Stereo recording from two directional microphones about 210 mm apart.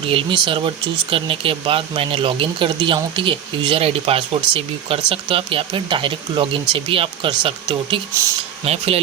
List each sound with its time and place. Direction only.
0.1 s speech: 25° right (ahead or behind)